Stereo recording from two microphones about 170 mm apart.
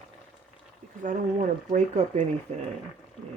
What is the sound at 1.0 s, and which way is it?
Speech, 45° right (ahead or behind).